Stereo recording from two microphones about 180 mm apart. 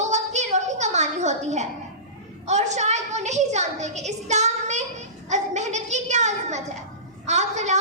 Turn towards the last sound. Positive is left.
turn(degrees=-40)  # may be behind; listen again after turning